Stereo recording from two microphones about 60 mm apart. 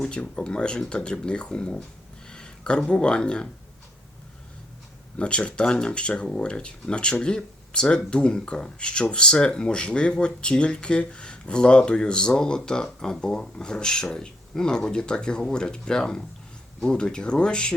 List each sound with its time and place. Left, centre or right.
0.1 s speech: centre
5.1 s speech: centre